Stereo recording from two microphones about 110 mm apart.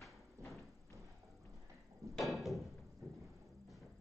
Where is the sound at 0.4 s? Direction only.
25° right (ahead or behind).